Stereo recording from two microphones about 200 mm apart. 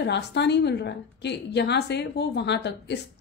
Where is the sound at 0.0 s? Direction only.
60° left (ahead or behind).